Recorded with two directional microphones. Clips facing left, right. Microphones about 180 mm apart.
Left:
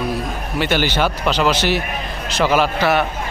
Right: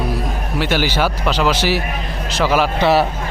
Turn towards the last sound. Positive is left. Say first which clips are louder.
# right 3 dB
turn(degrees=-25)  # may be behind; listen again after turning